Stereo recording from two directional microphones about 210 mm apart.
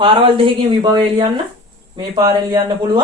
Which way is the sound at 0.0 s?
25° right (ahead or behind).